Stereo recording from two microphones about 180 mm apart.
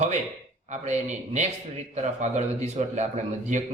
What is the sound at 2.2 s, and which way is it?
A man's voice, 40° right (ahead or behind).